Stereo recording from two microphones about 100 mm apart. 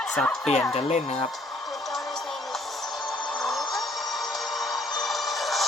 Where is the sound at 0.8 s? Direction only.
90° left.